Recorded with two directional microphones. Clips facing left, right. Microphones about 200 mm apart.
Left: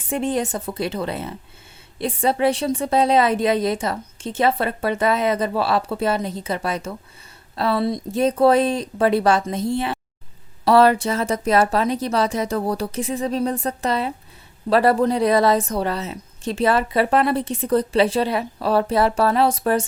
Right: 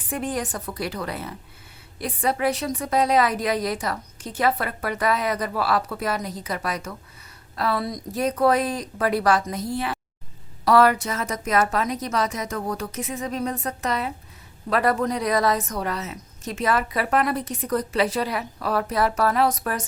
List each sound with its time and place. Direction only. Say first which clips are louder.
0.0 s a woman's voice: left 5 dB; 25° left (ahead or behind)